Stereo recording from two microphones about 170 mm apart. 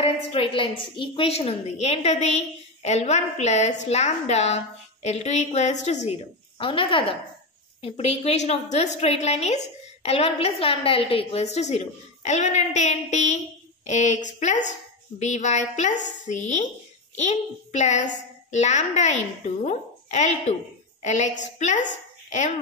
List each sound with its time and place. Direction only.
0.0 s a woman's voice: 35° left (ahead or behind)